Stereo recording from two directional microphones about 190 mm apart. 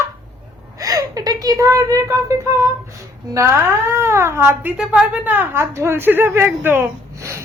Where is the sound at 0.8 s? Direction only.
20° right (ahead or behind).